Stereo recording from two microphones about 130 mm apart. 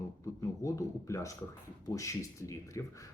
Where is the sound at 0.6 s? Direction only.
25° left (ahead or behind).